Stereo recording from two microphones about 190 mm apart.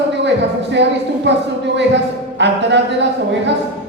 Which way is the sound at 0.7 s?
65° right (ahead or behind).